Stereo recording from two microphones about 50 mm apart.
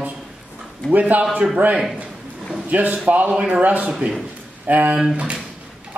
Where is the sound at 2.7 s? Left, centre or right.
Right.